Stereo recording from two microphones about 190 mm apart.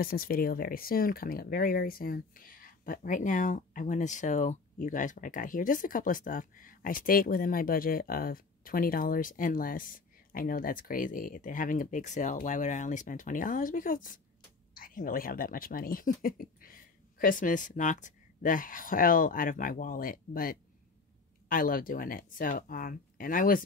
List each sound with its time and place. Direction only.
0.0 s speech: 50° left (ahead or behind)